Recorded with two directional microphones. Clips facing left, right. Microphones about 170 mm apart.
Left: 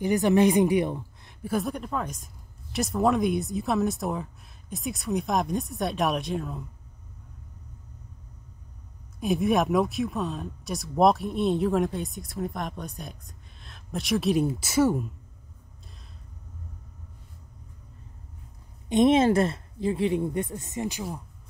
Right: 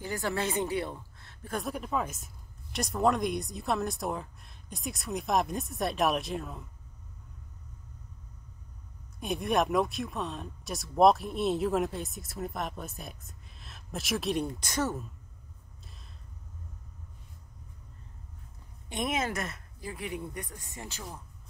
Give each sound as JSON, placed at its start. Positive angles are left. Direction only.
{"t": 0.0, "sound": "a woman's voice", "side_deg": 20}
{"t": 1.5, "sound": "speech", "side_deg": 0}
{"t": 9.2, "sound": "speech", "side_deg": 0}
{"t": 18.9, "sound": "speech", "side_deg": 25}